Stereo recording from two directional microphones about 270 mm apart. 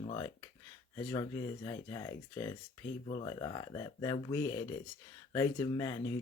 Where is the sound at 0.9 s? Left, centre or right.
Centre.